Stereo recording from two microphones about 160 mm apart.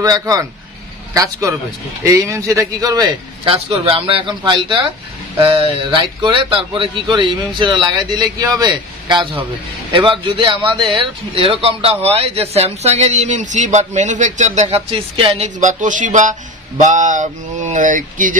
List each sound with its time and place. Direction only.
0.0 s a man's voice: 20° right (ahead or behind)
3.4 s a man's voice: 35° right (ahead or behind); by 18.4 s 55° right (ahead or behind)